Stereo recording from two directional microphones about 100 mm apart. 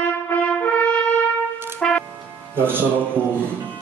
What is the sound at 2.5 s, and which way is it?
Music, 20° right (ahead or behind).